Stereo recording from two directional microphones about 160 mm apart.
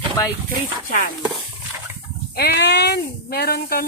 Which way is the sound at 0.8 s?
65° left (ahead or behind).